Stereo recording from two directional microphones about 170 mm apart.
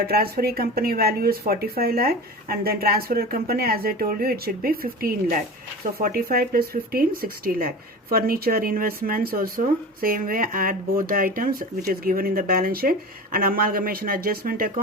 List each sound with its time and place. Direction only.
0.1 s speech: 65° right (ahead or behind)